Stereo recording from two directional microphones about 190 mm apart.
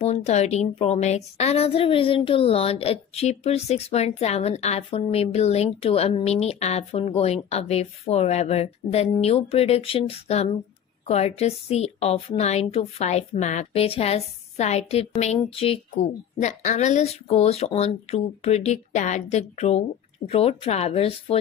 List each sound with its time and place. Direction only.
0.0 s a woman's voice: 35° left (ahead or behind)